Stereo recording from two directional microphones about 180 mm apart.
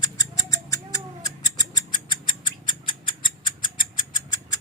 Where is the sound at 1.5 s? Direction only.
20° left (ahead or behind).